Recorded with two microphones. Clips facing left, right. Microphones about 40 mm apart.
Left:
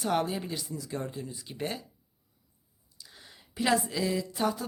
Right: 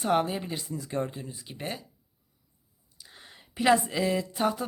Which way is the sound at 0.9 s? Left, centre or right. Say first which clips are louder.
Right 5 dB; right.